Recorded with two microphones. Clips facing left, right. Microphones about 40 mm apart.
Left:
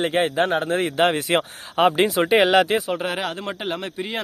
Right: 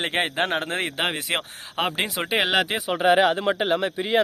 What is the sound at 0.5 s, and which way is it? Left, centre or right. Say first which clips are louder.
Speech: left 4 dB; right.